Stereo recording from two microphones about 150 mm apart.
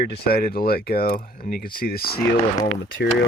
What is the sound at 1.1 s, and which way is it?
Speech, 75° left (ahead or behind).